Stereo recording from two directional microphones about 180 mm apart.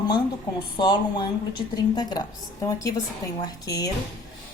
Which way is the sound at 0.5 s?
25° left (ahead or behind).